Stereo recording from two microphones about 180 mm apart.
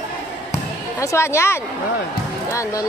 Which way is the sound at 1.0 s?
15° left (ahead or behind).